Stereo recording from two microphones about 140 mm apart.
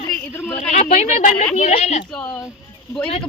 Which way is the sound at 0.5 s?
55° left (ahead or behind).